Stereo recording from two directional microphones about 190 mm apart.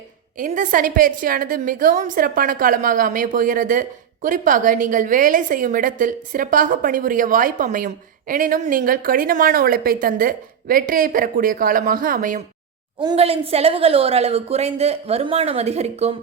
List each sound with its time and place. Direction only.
0.3 s a woman's voice: 45° right (ahead or behind)
13.0 s a woman's voice: 25° right (ahead or behind)